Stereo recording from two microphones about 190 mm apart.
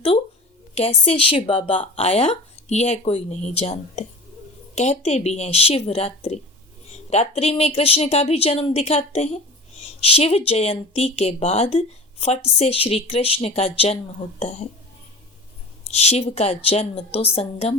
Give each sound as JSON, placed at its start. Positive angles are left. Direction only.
{"t": 0.7, "sound": "speech", "side_deg": 30}
{"t": 15.9, "sound": "speech", "side_deg": 35}